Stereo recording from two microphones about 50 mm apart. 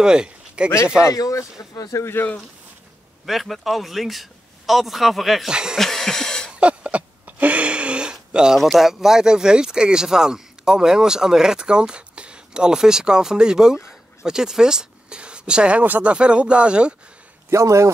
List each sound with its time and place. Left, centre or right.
0.0 s speech: centre
1.0 s speech: left
3.3 s a man's voice: centre
5.5 s speech: centre
5.8 s a sound: centre
6.5 s a sound: right
8.5 s speech: centre; by 15.8 s right
15.8 s speech: right
16.1 s speech: right
17.5 s a man's voice: right